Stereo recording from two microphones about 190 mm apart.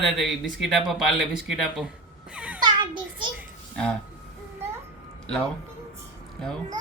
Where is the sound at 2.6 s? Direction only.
25° right (ahead or behind).